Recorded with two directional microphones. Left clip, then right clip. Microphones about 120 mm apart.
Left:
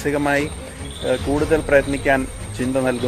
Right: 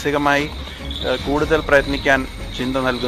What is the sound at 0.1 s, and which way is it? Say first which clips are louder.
Speech: right 2 dB; 35° left (ahead or behind).